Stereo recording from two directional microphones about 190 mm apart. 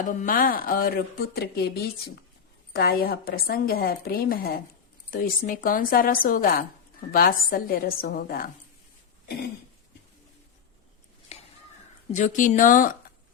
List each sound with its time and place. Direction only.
0.0 s a woman's voice: 40° left (ahead or behind)
2.7 s a woman's voice: 55° left (ahead or behind)
11.3 s a sound: 35° left (ahead or behind)
12.1 s a woman's voice: 45° left (ahead or behind)